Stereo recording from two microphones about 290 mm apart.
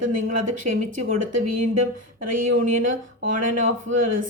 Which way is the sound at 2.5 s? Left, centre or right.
Right.